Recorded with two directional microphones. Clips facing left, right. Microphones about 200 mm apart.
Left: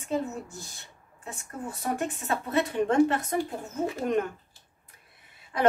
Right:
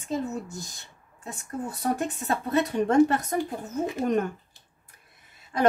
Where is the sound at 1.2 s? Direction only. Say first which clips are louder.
Right 4 dB; 35° right (ahead or behind).